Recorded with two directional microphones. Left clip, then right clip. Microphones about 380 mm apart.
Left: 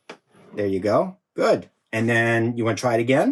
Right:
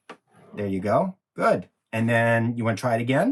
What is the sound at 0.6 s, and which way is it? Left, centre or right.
Speech, centre.